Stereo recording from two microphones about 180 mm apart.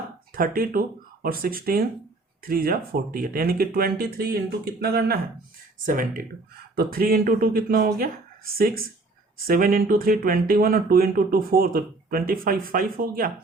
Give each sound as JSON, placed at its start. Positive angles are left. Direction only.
{"t": 0.3, "sound": "speech", "side_deg": -55}
{"t": 9.5, "sound": "speech", "side_deg": -55}